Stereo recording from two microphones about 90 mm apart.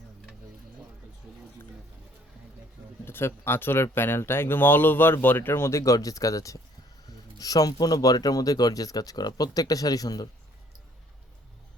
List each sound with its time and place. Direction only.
3.0 s speech: 25° left (ahead or behind); by 10.2 s 45° left (ahead or behind)